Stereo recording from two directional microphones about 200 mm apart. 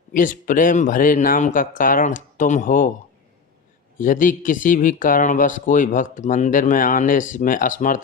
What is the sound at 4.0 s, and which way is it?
Speech, 40° left (ahead or behind).